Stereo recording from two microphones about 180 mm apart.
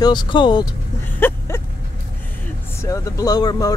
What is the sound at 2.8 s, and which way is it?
Speech, 20° left (ahead or behind).